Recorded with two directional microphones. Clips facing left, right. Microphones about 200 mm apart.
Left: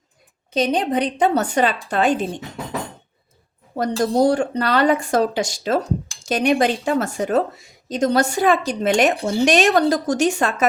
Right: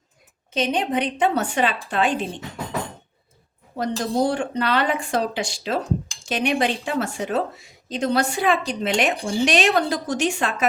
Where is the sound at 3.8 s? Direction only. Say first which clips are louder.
Left 4 dB; 45° left (ahead or behind).